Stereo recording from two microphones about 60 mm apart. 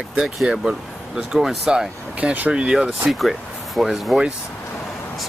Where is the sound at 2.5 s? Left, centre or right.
Centre.